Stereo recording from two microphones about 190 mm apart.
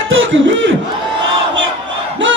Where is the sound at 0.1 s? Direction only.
85° right.